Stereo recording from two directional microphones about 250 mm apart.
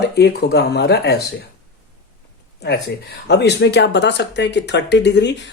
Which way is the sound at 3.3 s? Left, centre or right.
Left.